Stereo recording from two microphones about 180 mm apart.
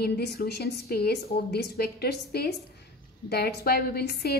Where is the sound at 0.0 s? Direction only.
65° left (ahead or behind).